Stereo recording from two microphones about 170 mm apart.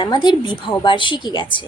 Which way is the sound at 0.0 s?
25° left (ahead or behind).